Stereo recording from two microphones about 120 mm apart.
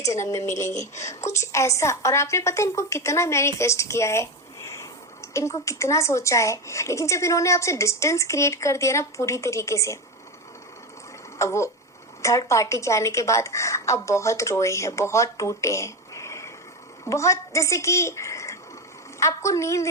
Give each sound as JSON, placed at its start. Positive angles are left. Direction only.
{"t": 0.0, "sound": "a woman's voice", "side_deg": 25}
{"t": 11.3, "sound": "a woman's voice", "side_deg": 25}